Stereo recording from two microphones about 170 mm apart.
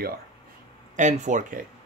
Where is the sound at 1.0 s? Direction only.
45° right (ahead or behind).